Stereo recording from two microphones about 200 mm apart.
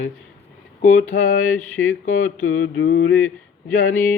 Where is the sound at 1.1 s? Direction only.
45° left (ahead or behind).